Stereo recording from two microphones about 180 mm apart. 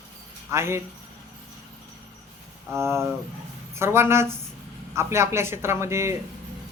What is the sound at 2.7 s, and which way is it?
Speech, 15° right (ahead or behind).